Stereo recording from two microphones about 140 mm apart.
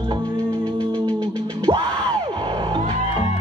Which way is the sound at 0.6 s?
10° left (ahead or behind).